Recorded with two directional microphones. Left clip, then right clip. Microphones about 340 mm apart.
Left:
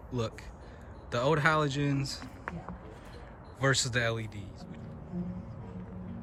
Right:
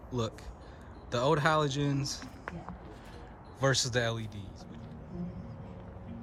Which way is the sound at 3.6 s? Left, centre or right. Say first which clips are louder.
Even; centre.